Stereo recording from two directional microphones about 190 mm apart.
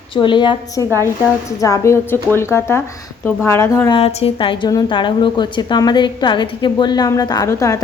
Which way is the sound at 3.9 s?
30° left (ahead or behind).